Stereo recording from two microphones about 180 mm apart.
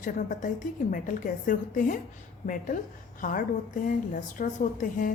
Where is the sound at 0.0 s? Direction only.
45° left (ahead or behind).